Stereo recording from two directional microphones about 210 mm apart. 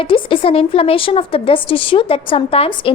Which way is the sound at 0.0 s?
25° left (ahead or behind).